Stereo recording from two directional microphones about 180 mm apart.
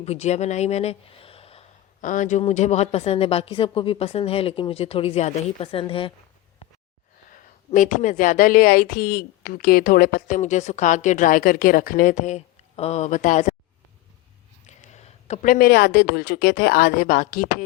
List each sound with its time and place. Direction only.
0.0 s speech: 35° left (ahead or behind)
2.0 s speech: 45° left (ahead or behind); by 6.1 s 30° left (ahead or behind)
7.3 s speech: 45° left (ahead or behind)
14.7 s speech: 40° left (ahead or behind)